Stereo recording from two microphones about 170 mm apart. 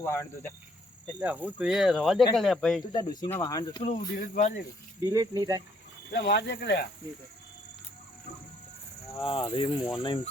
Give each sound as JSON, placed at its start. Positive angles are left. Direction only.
{"t": 0.0, "sound": "speech", "side_deg": 15}
{"t": 1.2, "sound": "speech", "side_deg": -10}
{"t": 2.9, "sound": "speech", "side_deg": 20}
{"t": 3.8, "sound": "speech", "side_deg": 40}
{"t": 4.9, "sound": "speech", "side_deg": -20}
{"t": 6.1, "sound": "speech", "side_deg": 75}
{"t": 9.2, "sound": "speech", "side_deg": 30}